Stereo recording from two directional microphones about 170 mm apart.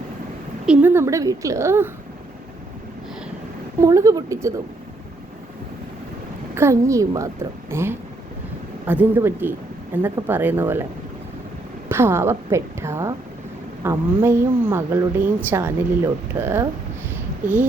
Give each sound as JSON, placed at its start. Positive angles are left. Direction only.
{"t": 0.6, "sound": "speech", "side_deg": -10}
{"t": 3.8, "sound": "speech", "side_deg": -20}
{"t": 6.5, "sound": "speech", "side_deg": -15}
{"t": 11.9, "sound": "speech", "side_deg": -15}